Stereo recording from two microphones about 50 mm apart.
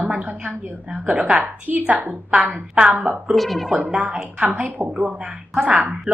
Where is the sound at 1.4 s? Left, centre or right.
Right.